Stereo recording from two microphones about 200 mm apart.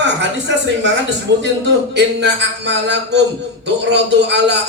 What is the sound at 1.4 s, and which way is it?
A man's voice, 65° right (ahead or behind).